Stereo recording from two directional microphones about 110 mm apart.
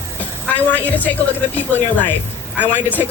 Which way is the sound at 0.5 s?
15° left (ahead or behind).